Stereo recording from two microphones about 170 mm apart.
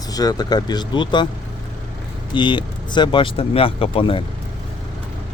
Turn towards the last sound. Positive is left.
turn(degrees=30)  # may be behind; listen again after turning